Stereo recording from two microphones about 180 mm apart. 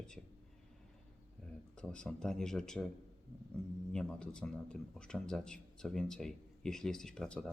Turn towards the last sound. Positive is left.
turn(degrees=5)  # may be behind; listen again after turning